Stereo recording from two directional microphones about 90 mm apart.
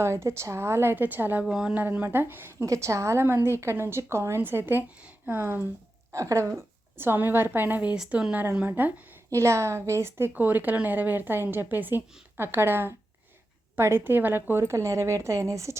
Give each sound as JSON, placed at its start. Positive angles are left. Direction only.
{"t": 0.0, "sound": "a woman's voice", "side_deg": -30}
{"t": 1.5, "sound": "a woman's voice", "side_deg": -10}
{"t": 6.1, "sound": "a woman's voice", "side_deg": -35}
{"t": 7.9, "sound": "speech", "side_deg": -5}
{"t": 9.3, "sound": "a woman's voice", "side_deg": -35}